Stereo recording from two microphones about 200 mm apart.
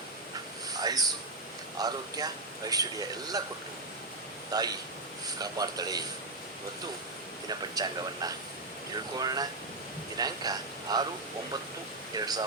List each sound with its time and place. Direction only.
0.7 s a sound: 20° right (ahead or behind)
1.8 s a man's voice: 20° right (ahead or behind)
4.5 s a man's voice: 20° right (ahead or behind)
7.8 s a man's voice: 20° right (ahead or behind)
9.1 s a man's voice: 20° right (ahead or behind)
12.1 s a man's voice: 20° right (ahead or behind)